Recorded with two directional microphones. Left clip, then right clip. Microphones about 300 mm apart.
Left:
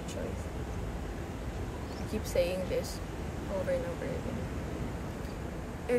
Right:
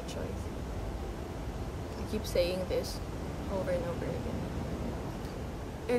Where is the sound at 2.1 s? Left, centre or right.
Centre.